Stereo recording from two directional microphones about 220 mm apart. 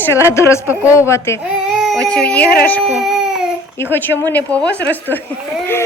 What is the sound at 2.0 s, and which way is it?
Speech, 5° left (ahead or behind).